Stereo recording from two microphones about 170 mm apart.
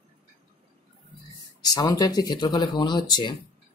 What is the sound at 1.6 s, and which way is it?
Speech, 20° left (ahead or behind).